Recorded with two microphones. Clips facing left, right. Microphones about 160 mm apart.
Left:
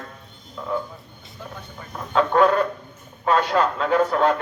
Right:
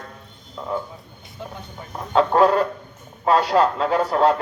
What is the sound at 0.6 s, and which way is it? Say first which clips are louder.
Speech: right 1 dB; 25° right (ahead or behind).